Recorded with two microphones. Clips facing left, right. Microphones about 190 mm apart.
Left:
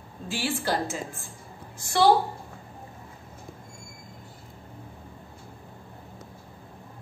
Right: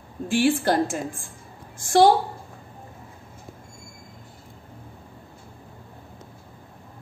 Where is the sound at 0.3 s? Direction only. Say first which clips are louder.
Right 8 dB; 50° right (ahead or behind).